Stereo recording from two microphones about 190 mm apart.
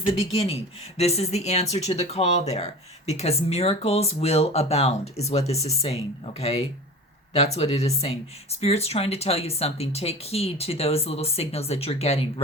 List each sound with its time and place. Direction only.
0.0 s speech: 30° left (ahead or behind)